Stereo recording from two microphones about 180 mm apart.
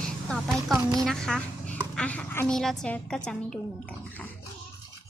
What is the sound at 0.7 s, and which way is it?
Speech, 20° right (ahead or behind).